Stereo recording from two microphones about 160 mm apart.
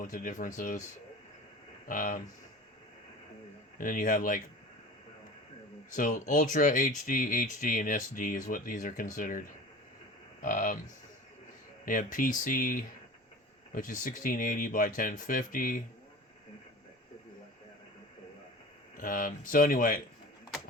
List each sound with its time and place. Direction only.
0.0 s speech: 55° left (ahead or behind)
1.9 s speech: 55° left (ahead or behind)
3.8 s speech: 55° left (ahead or behind)
5.9 s speech: 50° left (ahead or behind)
10.4 s speech: 55° left (ahead or behind)
11.9 s speech: 55° left (ahead or behind)
18.9 s speech: 60° left (ahead or behind)